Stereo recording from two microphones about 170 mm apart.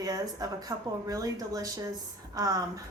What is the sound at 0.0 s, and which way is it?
A woman's voice, 20° right (ahead or behind).